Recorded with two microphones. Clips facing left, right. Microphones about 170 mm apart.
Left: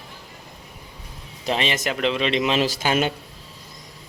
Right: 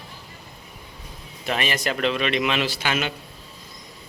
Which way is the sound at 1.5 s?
25° left (ahead or behind).